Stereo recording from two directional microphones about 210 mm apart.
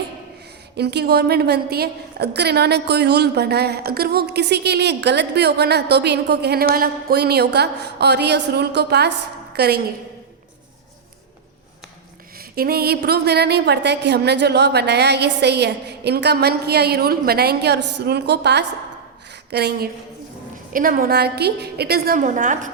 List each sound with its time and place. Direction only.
0.8 s a woman's voice: 50° right (ahead or behind)
12.5 s a woman's voice: 45° right (ahead or behind)